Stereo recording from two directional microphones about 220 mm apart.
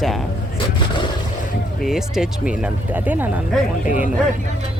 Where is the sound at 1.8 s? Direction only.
Centre (ahead or behind).